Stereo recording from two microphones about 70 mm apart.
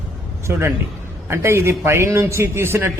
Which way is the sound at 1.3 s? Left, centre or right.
Right.